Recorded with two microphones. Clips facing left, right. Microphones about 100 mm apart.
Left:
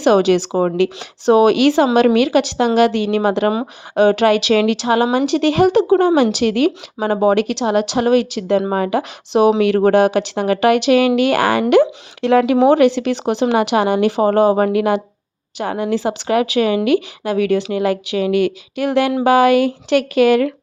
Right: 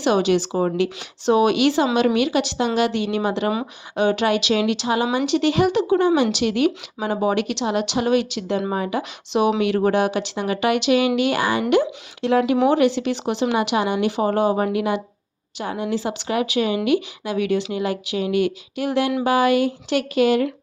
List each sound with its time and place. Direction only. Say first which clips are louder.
0.0 s a woman's voice: left 6 dB; 55° left (ahead or behind)
1.2 s a woman's voice: left 5 dB; 50° left (ahead or behind)
8.7 s speech: left 6 dB; 60° left (ahead or behind)
12.2 s speech: left 5 dB; 70° left (ahead or behind)
12.6 s a woman's voice: left 5 dB; 60° left (ahead or behind)
17.7 s speech: left 6 dB; 65° left (ahead or behind)